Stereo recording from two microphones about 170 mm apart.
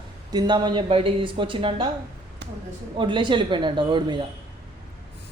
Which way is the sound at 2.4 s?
85° right.